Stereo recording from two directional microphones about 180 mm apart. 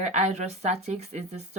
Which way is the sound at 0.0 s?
40° right (ahead or behind).